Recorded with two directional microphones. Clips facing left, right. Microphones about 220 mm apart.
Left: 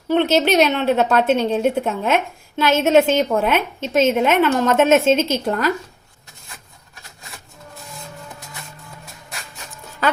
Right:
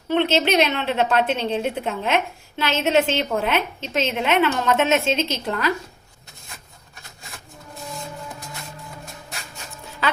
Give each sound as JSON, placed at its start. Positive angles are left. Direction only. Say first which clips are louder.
{"t": 0.1, "sound": "a woman's voice", "louder": "left 3 dB", "side_deg": 45}